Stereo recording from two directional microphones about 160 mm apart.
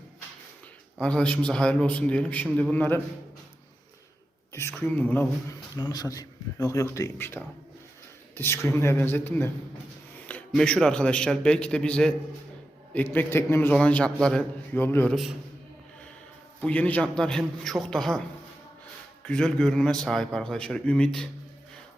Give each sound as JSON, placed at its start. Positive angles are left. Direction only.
{"t": 0.9, "sound": "a man's voice", "side_deg": 5}
{"t": 4.5, "sound": "a man's voice", "side_deg": 15}
{"t": 5.7, "sound": "a man's voice", "side_deg": 25}
{"t": 16.6, "sound": "a man's voice", "side_deg": 10}
{"t": 19.2, "sound": "a man's voice", "side_deg": 5}